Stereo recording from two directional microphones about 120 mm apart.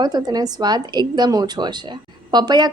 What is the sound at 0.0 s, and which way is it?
A woman's voice, 35° right (ahead or behind).